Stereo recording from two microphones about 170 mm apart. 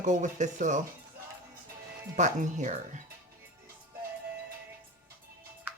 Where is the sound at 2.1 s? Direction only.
45° right (ahead or behind).